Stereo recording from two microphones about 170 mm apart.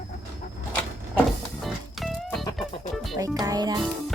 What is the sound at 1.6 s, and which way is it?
Music, centre (ahead or behind).